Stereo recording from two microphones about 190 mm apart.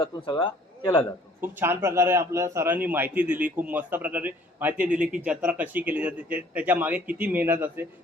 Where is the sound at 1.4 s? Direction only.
10° right (ahead or behind).